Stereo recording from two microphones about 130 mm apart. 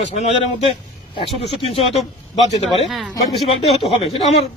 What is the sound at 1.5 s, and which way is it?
Speech, 50° left (ahead or behind).